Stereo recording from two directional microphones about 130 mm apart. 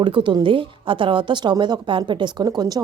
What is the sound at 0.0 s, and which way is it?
A woman's voice, 40° right (ahead or behind).